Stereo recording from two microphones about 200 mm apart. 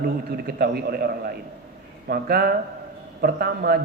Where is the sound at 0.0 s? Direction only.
50° right (ahead or behind).